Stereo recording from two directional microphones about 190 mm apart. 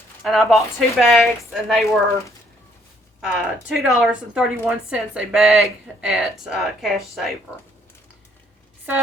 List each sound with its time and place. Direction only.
0.2 s a woman's voice: centre (ahead or behind)
3.2 s a woman's voice: 5° right (ahead or behind)